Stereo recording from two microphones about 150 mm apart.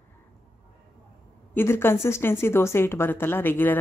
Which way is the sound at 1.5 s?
15° left (ahead or behind).